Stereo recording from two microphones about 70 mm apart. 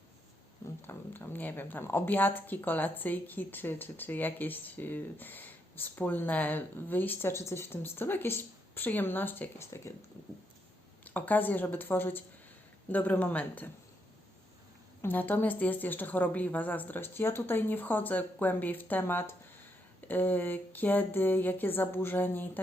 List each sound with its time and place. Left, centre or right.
0.8 s a woman's voice: left
9.6 s speech: left
11.0 s a woman's voice: left
15.0 s a woman's voice: left